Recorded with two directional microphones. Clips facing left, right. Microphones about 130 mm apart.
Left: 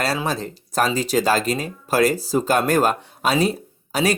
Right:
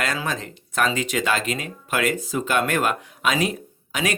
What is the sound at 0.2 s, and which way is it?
Speech, 35° left (ahead or behind).